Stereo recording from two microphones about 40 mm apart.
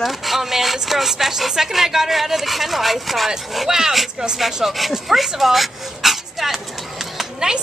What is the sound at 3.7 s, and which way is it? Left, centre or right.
Speech, centre.